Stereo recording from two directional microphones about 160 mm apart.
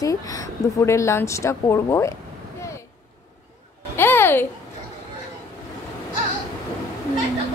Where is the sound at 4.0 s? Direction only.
15° left (ahead or behind).